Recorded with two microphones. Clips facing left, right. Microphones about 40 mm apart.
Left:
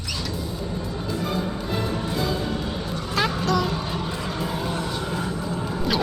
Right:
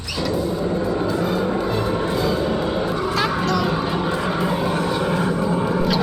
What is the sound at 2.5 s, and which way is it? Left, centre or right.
Vehicle, centre.